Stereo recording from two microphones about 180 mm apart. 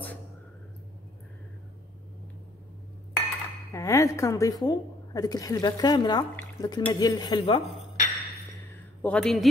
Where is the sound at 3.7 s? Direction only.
15° left (ahead or behind).